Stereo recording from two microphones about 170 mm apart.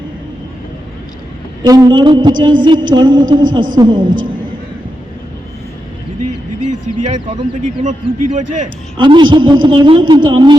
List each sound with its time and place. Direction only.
1.6 s a woman's voice: 20° right (ahead or behind)
6.7 s a man's voice: 45° right (ahead or behind)
9.0 s a woman's voice: 30° right (ahead or behind)